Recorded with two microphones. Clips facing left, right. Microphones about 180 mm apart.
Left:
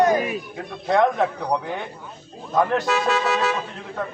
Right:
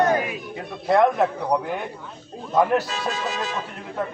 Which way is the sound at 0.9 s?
5° right (ahead or behind).